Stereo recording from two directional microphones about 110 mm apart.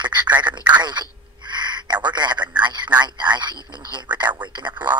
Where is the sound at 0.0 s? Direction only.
40° right (ahead or behind).